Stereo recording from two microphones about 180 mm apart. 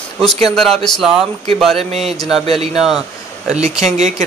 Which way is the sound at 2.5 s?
35° right (ahead or behind).